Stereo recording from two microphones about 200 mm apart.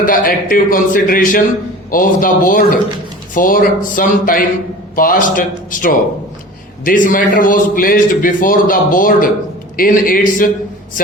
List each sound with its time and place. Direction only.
0.0 s a man's voice: 45° left (ahead or behind)